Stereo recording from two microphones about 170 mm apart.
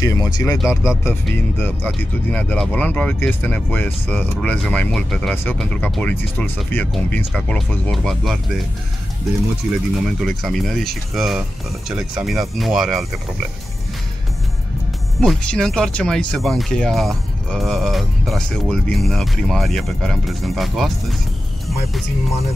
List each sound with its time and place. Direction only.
0.0 s speech: 20° left (ahead or behind)
0.6 s speech: 5° right (ahead or behind)
1.6 s speech: 10° left (ahead or behind)
10.0 s speech: centre (ahead or behind)
15.1 s speech: centre (ahead or behind)